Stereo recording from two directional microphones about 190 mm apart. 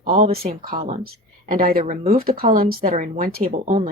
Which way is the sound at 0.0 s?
45° right (ahead or behind).